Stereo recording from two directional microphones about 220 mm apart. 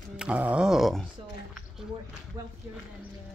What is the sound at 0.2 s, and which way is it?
Music, 5° right (ahead or behind).